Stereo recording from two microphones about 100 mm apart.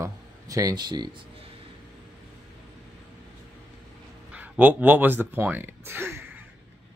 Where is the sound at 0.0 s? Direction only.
35° right (ahead or behind).